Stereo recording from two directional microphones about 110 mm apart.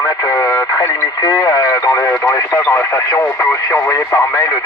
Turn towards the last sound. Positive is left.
turn(degrees=25)  # may be behind; listen again after turning